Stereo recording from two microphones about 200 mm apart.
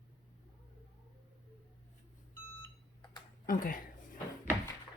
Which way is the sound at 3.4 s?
40° left (ahead or behind).